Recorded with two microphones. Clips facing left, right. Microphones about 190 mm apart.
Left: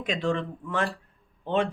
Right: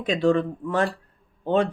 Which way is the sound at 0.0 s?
35° right (ahead or behind).